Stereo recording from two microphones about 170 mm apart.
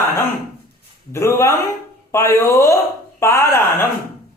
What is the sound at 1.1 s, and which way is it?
A man's voice, 15° left (ahead or behind).